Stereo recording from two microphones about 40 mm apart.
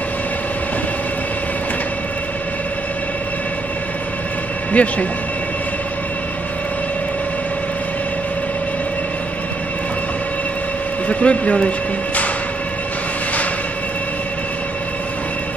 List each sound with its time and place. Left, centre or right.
4.7 s speech: left
11.1 s speech: left